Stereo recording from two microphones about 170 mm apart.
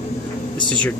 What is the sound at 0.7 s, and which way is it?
Speech, 5° left (ahead or behind).